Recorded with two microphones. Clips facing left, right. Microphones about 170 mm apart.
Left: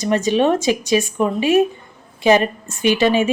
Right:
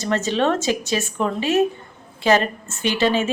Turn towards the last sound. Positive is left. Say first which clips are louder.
# left 4 dB
turn(degrees=15)  # may be behind; listen again after turning